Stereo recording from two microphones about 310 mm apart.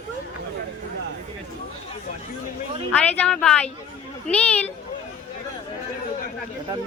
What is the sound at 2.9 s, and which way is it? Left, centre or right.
Speech, centre.